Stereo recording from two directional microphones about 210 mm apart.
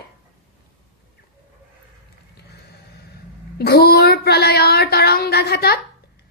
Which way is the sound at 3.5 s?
50° left (ahead or behind).